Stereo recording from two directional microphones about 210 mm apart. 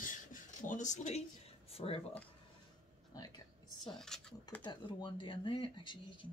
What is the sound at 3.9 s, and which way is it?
Speech, centre (ahead or behind).